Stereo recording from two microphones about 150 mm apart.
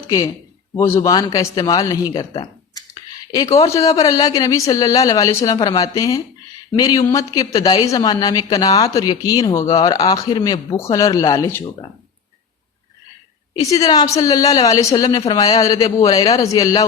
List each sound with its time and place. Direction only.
0.8 s speech: 20° left (ahead or behind)
3.3 s speech: 25° left (ahead or behind)
13.6 s speech: 20° left (ahead or behind)